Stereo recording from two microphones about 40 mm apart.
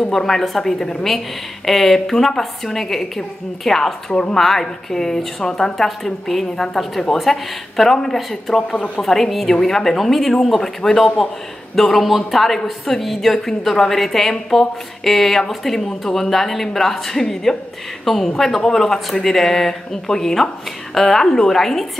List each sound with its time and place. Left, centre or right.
0.0 s a woman's voice: centre
4.1 s a woman's voice: left
4.4 s a woman's voice: centre
8.7 s speech: left
9.0 s a woman's voice: centre